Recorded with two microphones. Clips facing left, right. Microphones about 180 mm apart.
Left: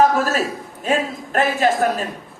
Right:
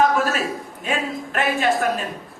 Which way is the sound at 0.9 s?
40° left (ahead or behind).